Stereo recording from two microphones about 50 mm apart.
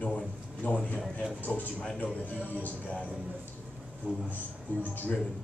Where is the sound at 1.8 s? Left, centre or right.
Left.